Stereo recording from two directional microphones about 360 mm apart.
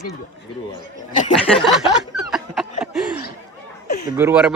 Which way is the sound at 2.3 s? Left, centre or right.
Centre.